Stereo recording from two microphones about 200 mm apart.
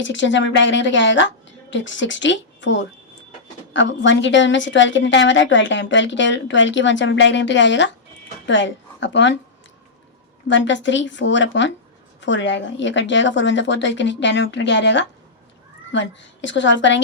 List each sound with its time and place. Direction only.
0.0 s a woman's voice: 65° left (ahead or behind)
10.5 s a woman's voice: 65° left (ahead or behind)